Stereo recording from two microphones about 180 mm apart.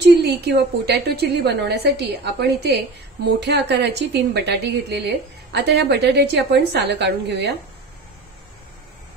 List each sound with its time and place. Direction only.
0.0 s a woman's voice: 65° right (ahead or behind)